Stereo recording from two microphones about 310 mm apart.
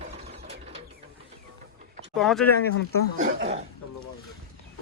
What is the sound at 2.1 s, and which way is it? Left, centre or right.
Speech, centre.